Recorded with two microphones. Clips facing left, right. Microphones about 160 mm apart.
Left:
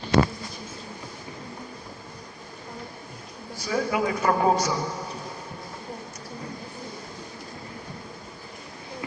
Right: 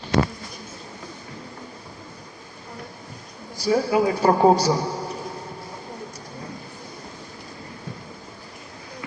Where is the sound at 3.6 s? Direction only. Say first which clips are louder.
Right 6 dB; 30° right (ahead or behind).